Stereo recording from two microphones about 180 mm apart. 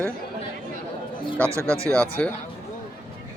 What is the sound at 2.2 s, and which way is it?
Speech, 5° left (ahead or behind).